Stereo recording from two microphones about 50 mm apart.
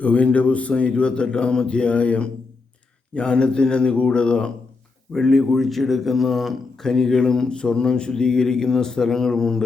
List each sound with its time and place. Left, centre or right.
0.0 s speech: left
5.1 s a man's voice: centre